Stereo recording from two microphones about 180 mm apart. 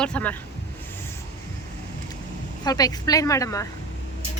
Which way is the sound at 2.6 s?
20° left (ahead or behind).